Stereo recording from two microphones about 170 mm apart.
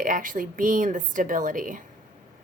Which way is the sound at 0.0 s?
50° right (ahead or behind).